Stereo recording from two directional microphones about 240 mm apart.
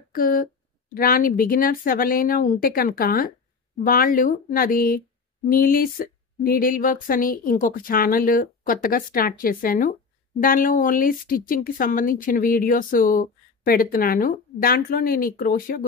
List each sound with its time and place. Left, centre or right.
0.1 s speech: left